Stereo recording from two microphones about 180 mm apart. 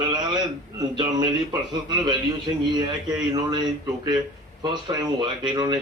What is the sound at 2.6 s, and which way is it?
Speech, 20° right (ahead or behind).